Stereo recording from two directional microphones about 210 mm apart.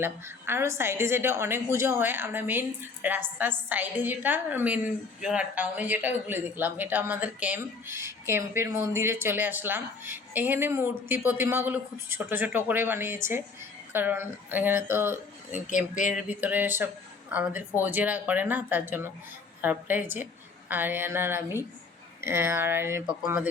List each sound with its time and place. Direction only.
0.0 s speech: 10° right (ahead or behind)
15.5 s speech: 35° left (ahead or behind)
16.0 s speech: 5° right (ahead or behind)